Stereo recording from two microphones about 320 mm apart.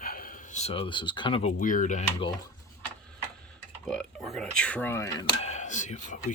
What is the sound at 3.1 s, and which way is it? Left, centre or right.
Speech, centre.